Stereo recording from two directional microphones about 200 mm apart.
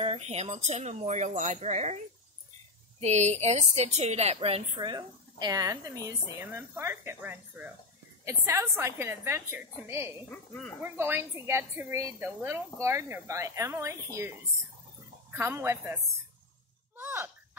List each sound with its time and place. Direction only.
0.0 s speech: 30° right (ahead or behind)
3.0 s a woman's voice: 35° right (ahead or behind); by 10.1 s 10° right (ahead or behind)
10.3 s speech: 5° left (ahead or behind)
10.8 s a woman's voice: 10° right (ahead or behind)
15.3 s a woman's voice: 10° right (ahead or behind)
16.9 s a sound: 10° right (ahead or behind)